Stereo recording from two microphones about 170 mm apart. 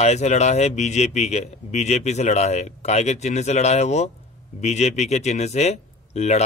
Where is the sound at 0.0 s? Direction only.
40° left (ahead or behind).